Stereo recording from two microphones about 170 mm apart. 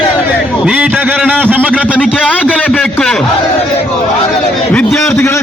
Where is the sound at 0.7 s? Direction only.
5° right (ahead or behind).